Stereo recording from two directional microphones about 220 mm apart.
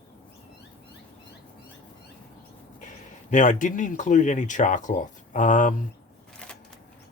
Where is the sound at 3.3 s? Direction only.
35° left (ahead or behind).